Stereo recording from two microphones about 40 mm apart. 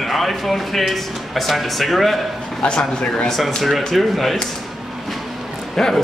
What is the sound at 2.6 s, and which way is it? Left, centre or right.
Speech, left.